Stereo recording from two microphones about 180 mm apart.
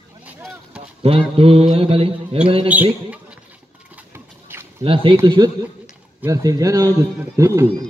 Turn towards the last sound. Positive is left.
turn(degrees=-15)  # may be behind; listen again after turning